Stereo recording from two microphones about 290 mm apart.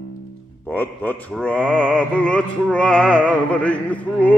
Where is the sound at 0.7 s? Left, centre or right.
Centre.